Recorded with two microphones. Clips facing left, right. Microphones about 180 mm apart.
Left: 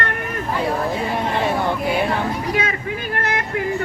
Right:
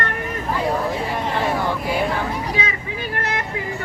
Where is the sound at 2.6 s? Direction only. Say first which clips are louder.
Left 3 dB; 55° left (ahead or behind).